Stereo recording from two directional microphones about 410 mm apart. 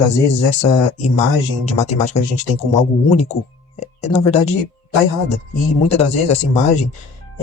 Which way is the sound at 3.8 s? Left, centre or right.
Centre.